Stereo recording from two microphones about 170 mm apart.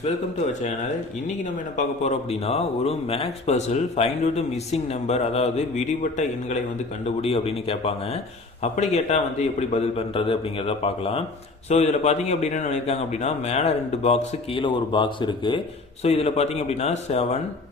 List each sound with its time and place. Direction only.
2.0 s speech: 40° left (ahead or behind)